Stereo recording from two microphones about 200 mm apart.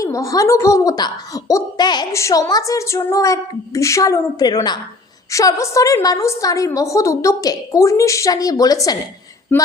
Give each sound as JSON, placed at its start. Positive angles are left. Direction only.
{"t": 0.0, "sound": "a woman's voice", "side_deg": 15}